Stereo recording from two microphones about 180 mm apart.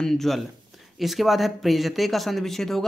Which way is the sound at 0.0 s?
Centre (ahead or behind).